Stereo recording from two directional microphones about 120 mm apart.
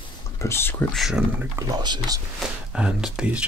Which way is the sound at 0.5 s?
20° left (ahead or behind).